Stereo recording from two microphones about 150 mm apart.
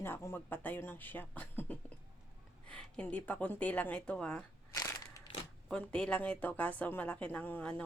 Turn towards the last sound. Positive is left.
turn(degrees=10)  # may be behind; listen again after turning